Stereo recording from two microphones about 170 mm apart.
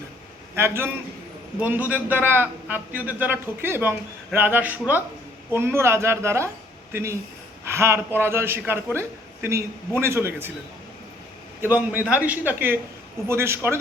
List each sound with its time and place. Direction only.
0.5 s a man's voice: 15° right (ahead or behind)
11.6 s a man's voice: 10° right (ahead or behind)